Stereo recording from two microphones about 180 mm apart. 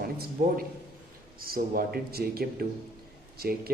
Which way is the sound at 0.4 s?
50° right (ahead or behind).